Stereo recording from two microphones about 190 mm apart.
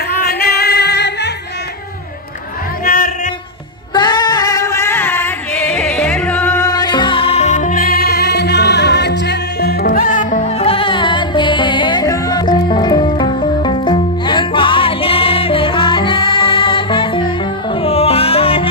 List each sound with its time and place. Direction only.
0.2 s singing: 55° left (ahead or behind)
2.8 s choir: 45° left (ahead or behind)
3.9 s singing: 20° left (ahead or behind)
17.7 s music: 30° left (ahead or behind)